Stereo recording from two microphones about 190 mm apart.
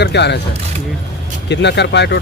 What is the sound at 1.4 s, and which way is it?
Speech, 65° left (ahead or behind).